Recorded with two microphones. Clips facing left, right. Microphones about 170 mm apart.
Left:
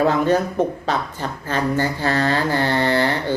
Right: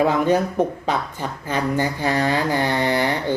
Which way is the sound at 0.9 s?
10° right (ahead or behind).